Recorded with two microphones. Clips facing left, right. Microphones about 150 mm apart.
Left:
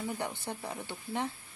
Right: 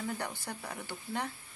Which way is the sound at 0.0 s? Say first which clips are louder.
Left 2 dB; 20° left (ahead or behind).